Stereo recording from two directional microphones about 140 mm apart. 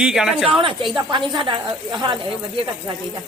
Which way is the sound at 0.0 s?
5° right (ahead or behind).